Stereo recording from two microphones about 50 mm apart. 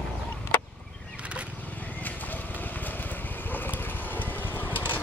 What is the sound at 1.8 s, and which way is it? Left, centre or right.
Horse, left.